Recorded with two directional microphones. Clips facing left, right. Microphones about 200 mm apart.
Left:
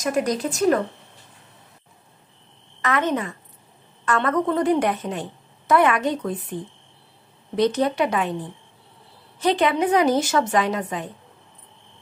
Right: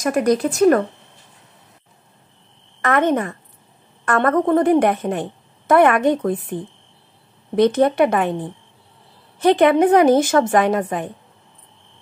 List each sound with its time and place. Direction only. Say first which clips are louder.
0.0 s speech: right 5 dB; 60° right (ahead or behind)
2.8 s a woman's voice: right 5 dB; 55° right (ahead or behind)
7.5 s a woman's voice: right 5 dB; 55° right (ahead or behind)
9.4 s a woman's voice: right 7 dB; 55° right (ahead or behind)